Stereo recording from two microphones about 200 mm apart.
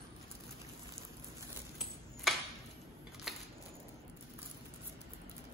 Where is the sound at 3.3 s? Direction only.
Centre (ahead or behind).